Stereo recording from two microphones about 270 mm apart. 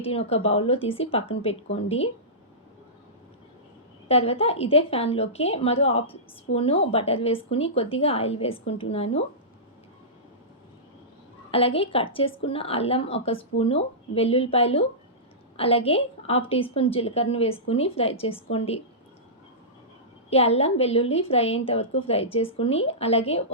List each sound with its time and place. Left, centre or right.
0.0 s a woman's voice: left
4.1 s a woman's voice: left
11.5 s a woman's voice: left
20.3 s a woman's voice: left